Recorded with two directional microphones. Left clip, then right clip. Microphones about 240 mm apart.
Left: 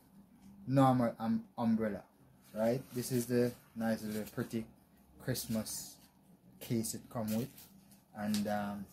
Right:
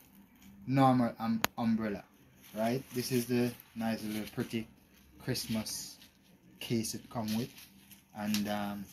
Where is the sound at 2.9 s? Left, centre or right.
Centre.